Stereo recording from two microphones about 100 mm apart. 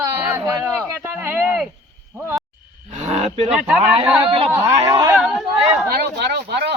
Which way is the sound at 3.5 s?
10° right (ahead or behind).